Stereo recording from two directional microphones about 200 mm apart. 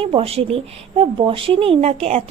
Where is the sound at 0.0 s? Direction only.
30° right (ahead or behind).